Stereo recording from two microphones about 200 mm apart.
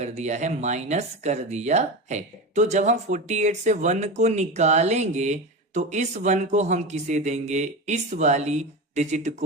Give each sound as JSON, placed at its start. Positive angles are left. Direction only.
{"t": 0.0, "sound": "speech", "side_deg": -35}